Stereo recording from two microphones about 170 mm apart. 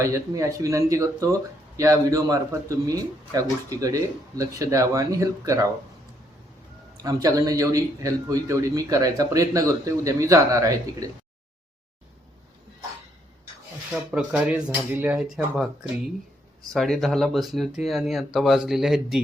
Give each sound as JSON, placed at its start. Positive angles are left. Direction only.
{"t": 0.0, "sound": "speech", "side_deg": -15}
{"t": 6.9, "sound": "speech", "side_deg": -20}
{"t": 14.1, "sound": "speech", "side_deg": -5}
{"t": 16.7, "sound": "speech", "side_deg": 0}